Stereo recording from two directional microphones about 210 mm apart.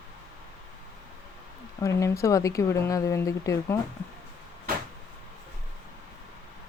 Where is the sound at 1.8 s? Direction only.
15° left (ahead or behind).